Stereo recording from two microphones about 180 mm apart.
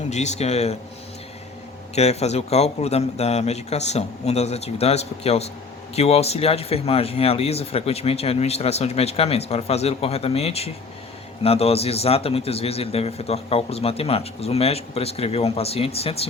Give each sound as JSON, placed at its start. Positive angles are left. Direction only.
{"t": 0.1, "sound": "speech", "side_deg": 40}
{"t": 2.0, "sound": "speech", "side_deg": 35}